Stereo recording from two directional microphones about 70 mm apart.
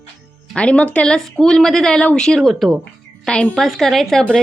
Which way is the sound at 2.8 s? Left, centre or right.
Centre.